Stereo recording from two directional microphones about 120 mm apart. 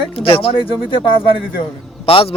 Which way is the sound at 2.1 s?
50° left (ahead or behind).